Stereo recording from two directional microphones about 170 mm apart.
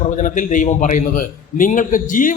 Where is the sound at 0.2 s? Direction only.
50° left (ahead or behind).